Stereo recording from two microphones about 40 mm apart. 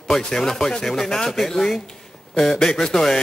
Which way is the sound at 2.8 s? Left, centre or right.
Centre.